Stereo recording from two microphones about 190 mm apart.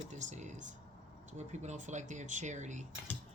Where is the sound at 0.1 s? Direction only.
40° right (ahead or behind).